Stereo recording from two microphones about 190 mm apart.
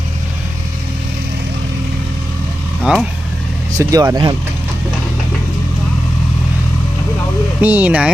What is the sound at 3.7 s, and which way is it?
Speech, 15° right (ahead or behind).